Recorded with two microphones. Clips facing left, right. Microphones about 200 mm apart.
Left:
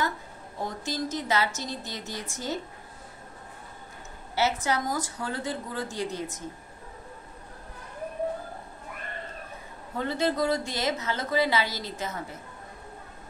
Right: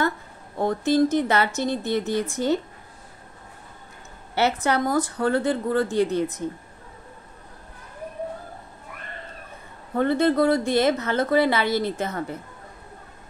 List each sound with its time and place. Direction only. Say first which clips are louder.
0.6 s a woman's voice: right 12 dB; 60° right (ahead or behind)
4.4 s a woman's voice: right 5 dB; 60° right (ahead or behind)
9.9 s a woman's voice: right 7 dB; 55° right (ahead or behind)